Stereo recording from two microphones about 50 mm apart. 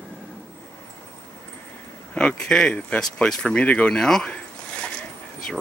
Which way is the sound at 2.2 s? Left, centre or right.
Centre.